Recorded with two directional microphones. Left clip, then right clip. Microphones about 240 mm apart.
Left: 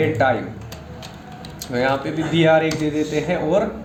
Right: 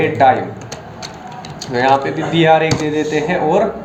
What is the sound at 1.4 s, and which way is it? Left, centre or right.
Speech, left.